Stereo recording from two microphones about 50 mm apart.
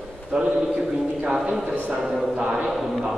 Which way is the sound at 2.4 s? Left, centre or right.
Centre.